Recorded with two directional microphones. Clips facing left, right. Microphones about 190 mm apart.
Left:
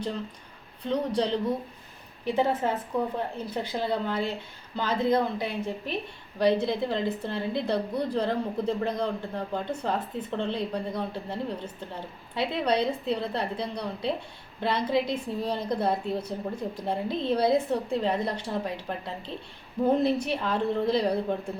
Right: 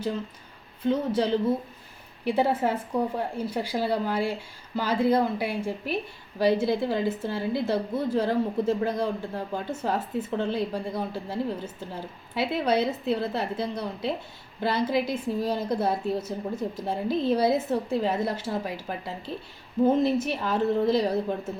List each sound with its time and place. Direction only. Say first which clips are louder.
0.8 s a woman's voice: right 2 dB; 5° right (ahead or behind)